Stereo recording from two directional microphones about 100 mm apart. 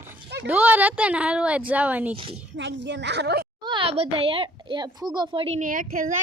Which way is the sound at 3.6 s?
55° right (ahead or behind).